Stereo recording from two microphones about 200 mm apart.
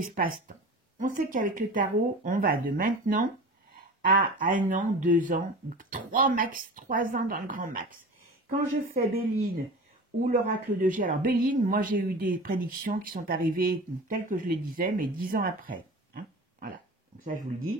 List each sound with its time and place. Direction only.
0.0 s speech: 45° right (ahead or behind)
4.6 s speech: 40° right (ahead or behind)